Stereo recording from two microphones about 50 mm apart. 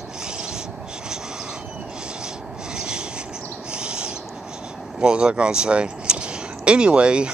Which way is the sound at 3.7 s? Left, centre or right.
Centre.